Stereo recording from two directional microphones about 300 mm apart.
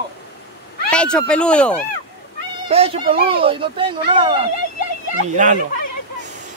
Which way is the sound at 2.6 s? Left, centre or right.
Centre.